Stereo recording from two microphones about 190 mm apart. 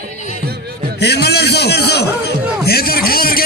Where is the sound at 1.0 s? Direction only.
60° left (ahead or behind).